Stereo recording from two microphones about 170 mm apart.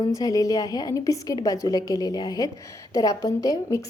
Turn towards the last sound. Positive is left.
turn(degrees=20)  # may be behind; listen again after turning